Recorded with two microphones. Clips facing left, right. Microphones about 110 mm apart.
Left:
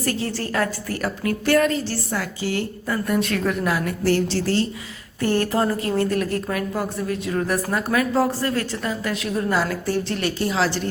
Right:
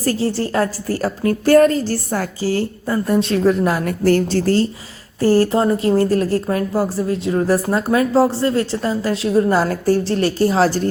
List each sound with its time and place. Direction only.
0.0 s speech: 35° right (ahead or behind)
3.8 s speech: 45° right (ahead or behind)
5.2 s speech: 35° right (ahead or behind)